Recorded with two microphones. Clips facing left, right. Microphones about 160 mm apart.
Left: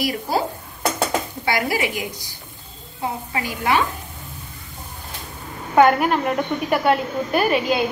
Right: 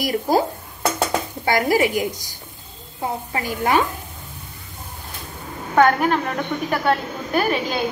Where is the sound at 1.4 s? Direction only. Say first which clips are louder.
Right 6 dB; 45° right (ahead or behind).